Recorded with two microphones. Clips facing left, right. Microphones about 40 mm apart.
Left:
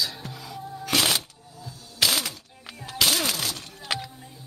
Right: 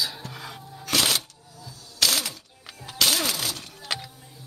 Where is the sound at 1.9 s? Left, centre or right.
Centre.